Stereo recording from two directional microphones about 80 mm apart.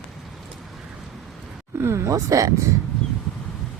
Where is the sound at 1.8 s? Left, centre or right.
Right.